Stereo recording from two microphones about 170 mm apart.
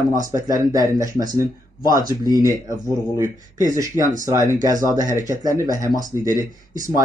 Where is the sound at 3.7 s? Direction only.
15° right (ahead or behind).